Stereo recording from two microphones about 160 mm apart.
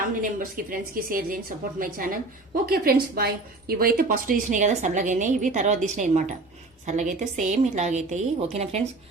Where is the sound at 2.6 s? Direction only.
75° right (ahead or behind).